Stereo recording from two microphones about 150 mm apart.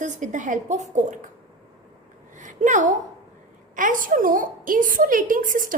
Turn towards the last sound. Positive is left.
turn(degrees=-60)  # may be behind; listen again after turning